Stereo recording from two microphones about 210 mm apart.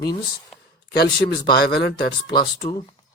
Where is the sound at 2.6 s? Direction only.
25° left (ahead or behind).